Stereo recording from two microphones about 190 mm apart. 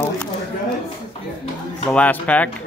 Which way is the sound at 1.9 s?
5° left (ahead or behind).